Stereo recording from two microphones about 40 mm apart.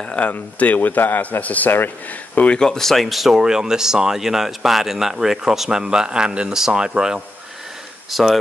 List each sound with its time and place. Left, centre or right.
0.3 s a man's voice: left
2.6 s speech: centre
8.1 s speech: centre